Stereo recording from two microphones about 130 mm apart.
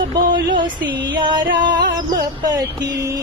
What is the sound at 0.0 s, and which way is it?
Music, 35° right (ahead or behind).